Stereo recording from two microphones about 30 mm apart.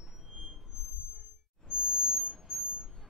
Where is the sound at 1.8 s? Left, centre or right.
Right.